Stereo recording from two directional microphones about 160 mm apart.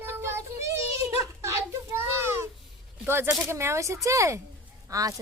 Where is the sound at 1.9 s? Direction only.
15° right (ahead or behind).